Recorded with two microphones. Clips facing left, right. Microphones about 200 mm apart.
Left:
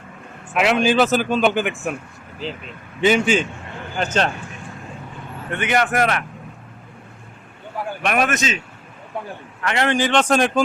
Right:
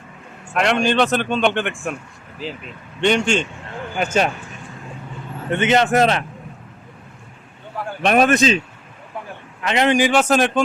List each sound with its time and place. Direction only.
0.5 s a man's voice: 5° left (ahead or behind)
3.0 s a man's voice: 5° left (ahead or behind)
3.9 s a man's voice: 10° right (ahead or behind)
5.5 s a man's voice: 25° right (ahead or behind)
8.0 s speech: 30° right (ahead or behind)
9.6 s a man's voice: 20° right (ahead or behind); by 10.6 s centre (ahead or behind)